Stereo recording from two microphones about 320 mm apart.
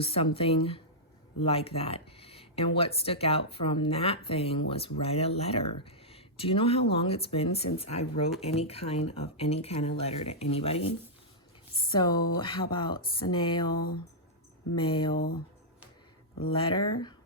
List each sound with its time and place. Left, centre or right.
0.0 s speech: centre
14.8 s speech: centre
16.4 s speech: centre